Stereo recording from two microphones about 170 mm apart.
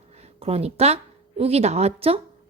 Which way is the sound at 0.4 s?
35° right (ahead or behind).